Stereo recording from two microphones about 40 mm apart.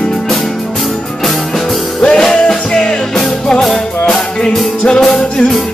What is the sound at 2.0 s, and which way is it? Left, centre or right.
Music, centre.